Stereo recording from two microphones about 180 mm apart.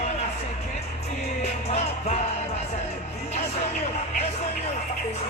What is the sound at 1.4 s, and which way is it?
Music, 40° left (ahead or behind).